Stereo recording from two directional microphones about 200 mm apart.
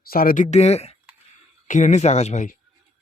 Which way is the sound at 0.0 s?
45° left (ahead or behind).